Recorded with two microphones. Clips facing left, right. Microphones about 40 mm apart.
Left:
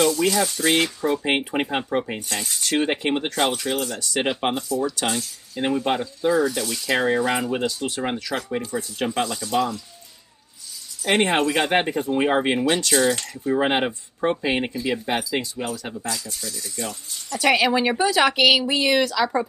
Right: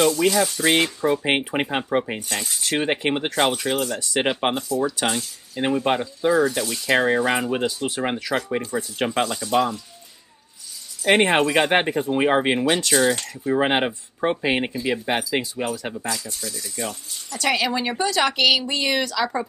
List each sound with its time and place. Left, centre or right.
0.3 s speech: centre
0.6 s speech: centre
11.3 s speech: centre
16.5 s speech: centre
17.4 s speech: centre